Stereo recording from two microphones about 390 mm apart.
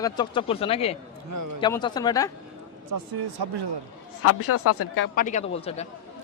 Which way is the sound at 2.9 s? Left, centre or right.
Right.